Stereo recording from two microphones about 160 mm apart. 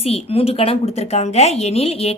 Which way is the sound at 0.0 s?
40° left (ahead or behind).